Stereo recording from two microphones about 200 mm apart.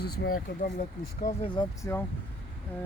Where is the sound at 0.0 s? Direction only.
50° left (ahead or behind).